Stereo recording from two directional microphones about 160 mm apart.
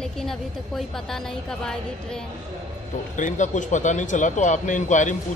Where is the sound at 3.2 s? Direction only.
50° left (ahead or behind).